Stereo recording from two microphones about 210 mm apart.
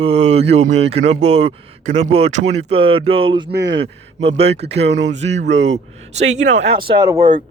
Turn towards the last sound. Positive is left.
turn(degrees=-20)  # may be behind; listen again after turning